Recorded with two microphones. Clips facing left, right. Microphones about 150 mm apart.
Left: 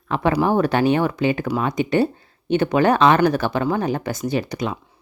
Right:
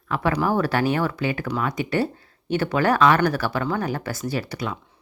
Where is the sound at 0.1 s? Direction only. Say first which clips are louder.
Left 4 dB; 20° left (ahead or behind).